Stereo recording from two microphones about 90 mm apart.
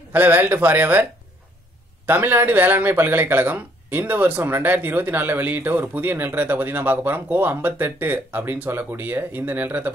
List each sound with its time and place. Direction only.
0.1 s speech: 20° right (ahead or behind)
2.0 s speech: 20° right (ahead or behind)